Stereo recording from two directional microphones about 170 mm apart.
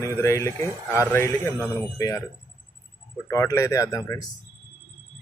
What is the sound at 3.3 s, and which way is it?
Speech, 15° left (ahead or behind).